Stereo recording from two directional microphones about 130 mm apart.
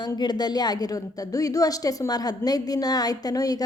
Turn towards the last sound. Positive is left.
turn(degrees=30)  # may be behind; listen again after turning